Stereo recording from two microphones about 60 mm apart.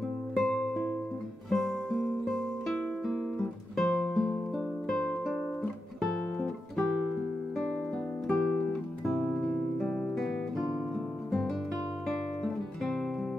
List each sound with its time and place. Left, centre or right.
0.4 s music: centre
8.3 s guitar: centre
9.0 s music: centre